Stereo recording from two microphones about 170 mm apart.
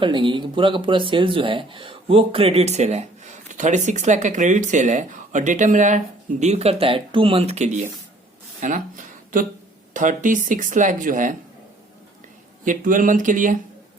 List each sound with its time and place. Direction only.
0.0 s speech: 30° right (ahead or behind); by 11.3 s 50° right (ahead or behind)
12.6 s speech: 50° right (ahead or behind)